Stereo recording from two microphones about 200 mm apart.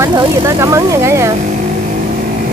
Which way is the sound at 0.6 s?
15° right (ahead or behind).